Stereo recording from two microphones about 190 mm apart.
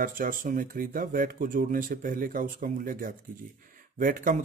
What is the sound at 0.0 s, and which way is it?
A man's voice, 45° right (ahead or behind).